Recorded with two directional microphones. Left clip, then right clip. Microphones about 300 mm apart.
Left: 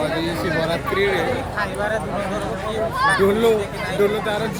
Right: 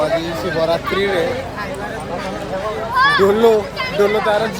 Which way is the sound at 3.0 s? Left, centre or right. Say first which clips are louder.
Right 6 dB; right.